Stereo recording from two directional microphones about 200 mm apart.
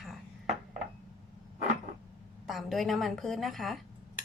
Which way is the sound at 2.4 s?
Centre (ahead or behind).